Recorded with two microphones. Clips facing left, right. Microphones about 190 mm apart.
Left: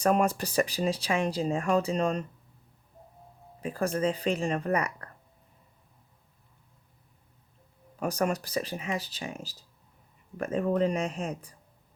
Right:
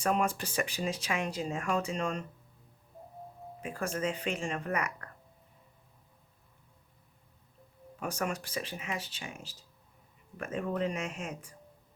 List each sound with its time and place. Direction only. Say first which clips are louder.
0.0 s speech: left 5 dB; 40° left (ahead or behind)
3.6 s speech: left 6 dB; 35° left (ahead or behind)
7.9 s speech: left 6 dB; 40° left (ahead or behind)